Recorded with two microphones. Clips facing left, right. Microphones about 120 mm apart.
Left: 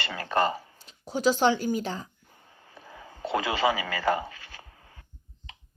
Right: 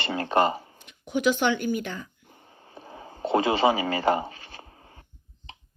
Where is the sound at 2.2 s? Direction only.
25° right (ahead or behind).